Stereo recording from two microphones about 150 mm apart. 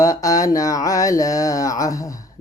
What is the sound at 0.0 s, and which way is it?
Speech, 20° left (ahead or behind).